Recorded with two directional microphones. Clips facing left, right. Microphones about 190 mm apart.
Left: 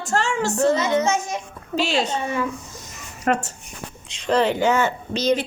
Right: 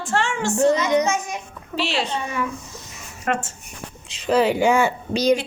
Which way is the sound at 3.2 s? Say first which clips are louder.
Left 3 dB; 40° left (ahead or behind).